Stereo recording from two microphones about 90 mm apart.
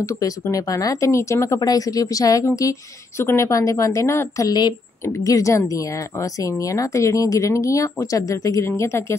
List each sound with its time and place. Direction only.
0.0 s speech: 35° left (ahead or behind)